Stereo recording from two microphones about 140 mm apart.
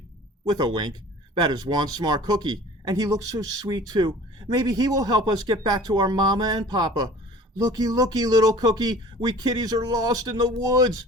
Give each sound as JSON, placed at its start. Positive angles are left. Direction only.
{"t": 0.4, "sound": "speech", "side_deg": -30}